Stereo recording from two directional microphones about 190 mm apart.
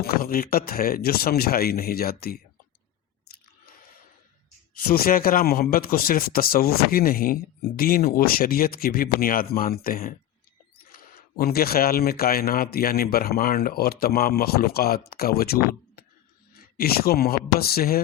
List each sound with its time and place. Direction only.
0.0 s speech: 50° left (ahead or behind)
4.9 s speech: 50° left (ahead or behind)